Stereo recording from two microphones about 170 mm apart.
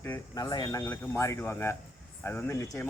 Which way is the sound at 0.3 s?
20° left (ahead or behind).